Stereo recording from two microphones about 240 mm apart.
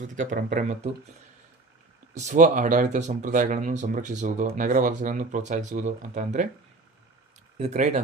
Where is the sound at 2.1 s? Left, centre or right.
Right.